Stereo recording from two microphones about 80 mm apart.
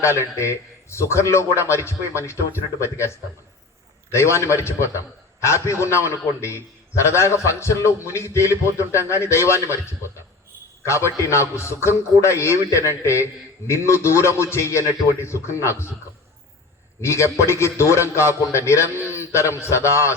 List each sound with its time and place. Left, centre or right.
0.0 s a man's voice: left
17.0 s a man's voice: left